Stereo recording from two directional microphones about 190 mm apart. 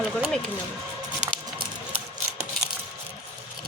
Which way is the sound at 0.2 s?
5° left (ahead or behind).